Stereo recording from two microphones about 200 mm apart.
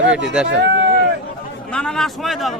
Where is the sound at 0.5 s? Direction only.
60° right (ahead or behind).